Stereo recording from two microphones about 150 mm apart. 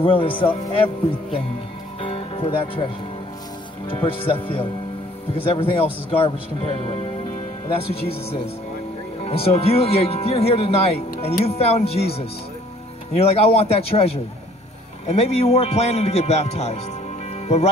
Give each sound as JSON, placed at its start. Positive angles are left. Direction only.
{"t": 0.0, "sound": "speech", "side_deg": 35}
{"t": 2.0, "sound": "music", "side_deg": 35}
{"t": 3.9, "sound": "speech", "side_deg": 35}
{"t": 13.2, "sound": "speech", "side_deg": 40}